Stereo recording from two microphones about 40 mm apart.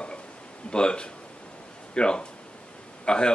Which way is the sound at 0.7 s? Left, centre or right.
Left.